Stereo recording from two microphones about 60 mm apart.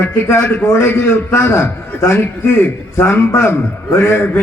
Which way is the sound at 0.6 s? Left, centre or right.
Left.